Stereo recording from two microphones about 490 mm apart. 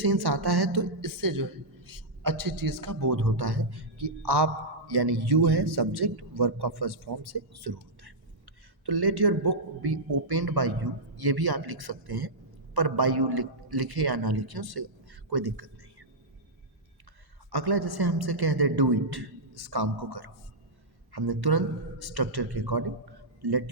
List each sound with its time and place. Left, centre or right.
0.0 s a woman's voice: right
17.5 s a woman's voice: right